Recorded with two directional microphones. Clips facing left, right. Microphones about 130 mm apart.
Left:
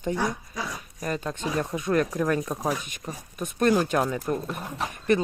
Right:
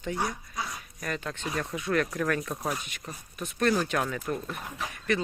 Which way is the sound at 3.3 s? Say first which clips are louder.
Left 4 dB; 45° left (ahead or behind).